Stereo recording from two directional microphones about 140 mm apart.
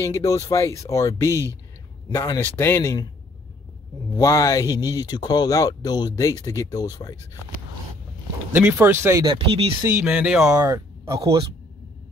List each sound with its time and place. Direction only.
0.0 s speech: 20° left (ahead or behind)
4.1 s speech: 25° left (ahead or behind)
8.5 s speech: 15° right (ahead or behind)
9.2 s speech: 35° right (ahead or behind)
9.8 s speech: 10° right (ahead or behind)
10.7 s speech: 25° right (ahead or behind)